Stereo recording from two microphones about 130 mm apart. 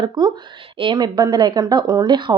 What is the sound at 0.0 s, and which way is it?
A woman's voice, 35° right (ahead or behind).